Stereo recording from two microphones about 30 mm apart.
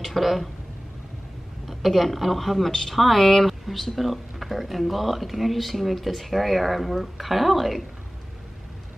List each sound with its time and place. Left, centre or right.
0.2 s speech: centre
1.7 s speech: centre